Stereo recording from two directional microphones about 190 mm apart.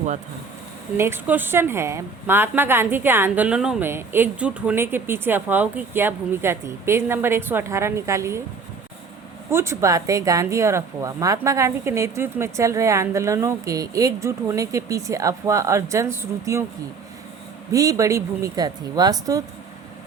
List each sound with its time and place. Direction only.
0.9 s a woman's voice: 10° right (ahead or behind)
9.5 s a woman's voice: 15° right (ahead or behind)
17.7 s a woman's voice: 15° right (ahead or behind)